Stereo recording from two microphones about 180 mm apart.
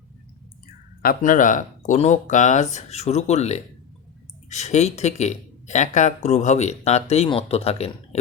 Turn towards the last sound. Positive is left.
turn(degrees=35)  # may be behind; listen again after turning